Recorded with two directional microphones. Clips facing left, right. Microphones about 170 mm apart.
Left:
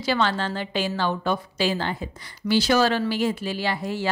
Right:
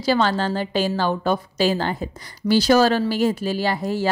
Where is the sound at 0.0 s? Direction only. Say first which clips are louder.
Right 4 dB; 40° right (ahead or behind).